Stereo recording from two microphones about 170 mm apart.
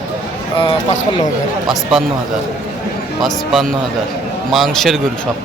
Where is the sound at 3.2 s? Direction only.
Centre (ahead or behind).